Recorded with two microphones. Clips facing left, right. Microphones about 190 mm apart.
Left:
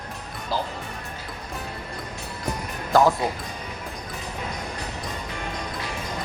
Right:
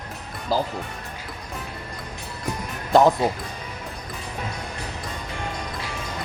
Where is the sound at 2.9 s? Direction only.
20° right (ahead or behind).